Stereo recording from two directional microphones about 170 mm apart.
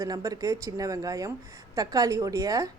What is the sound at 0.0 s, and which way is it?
A woman's voice, 20° right (ahead or behind).